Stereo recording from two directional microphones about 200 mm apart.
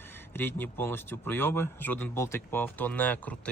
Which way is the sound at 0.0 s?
10° left (ahead or behind).